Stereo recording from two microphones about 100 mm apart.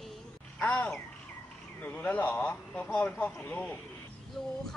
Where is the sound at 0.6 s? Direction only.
15° left (ahead or behind).